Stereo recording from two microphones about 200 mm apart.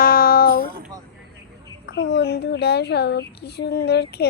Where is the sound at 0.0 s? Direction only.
45° left (ahead or behind).